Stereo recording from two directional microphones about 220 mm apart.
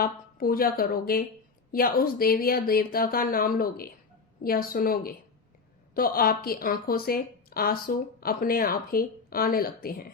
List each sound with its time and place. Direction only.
0.0 s a woman's voice: 40° left (ahead or behind)